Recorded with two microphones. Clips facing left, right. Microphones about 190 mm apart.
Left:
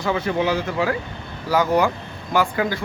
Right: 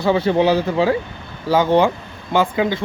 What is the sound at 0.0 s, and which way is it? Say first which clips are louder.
Speech: right 6 dB; 30° right (ahead or behind).